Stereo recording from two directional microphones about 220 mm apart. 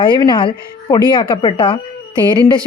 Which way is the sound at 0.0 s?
20° left (ahead or behind).